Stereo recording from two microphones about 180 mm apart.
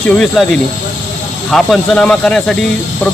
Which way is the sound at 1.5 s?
Centre (ahead or behind).